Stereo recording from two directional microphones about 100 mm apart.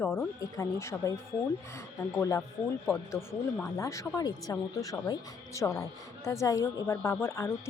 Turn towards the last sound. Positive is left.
turn(degrees=25)  # may be behind; listen again after turning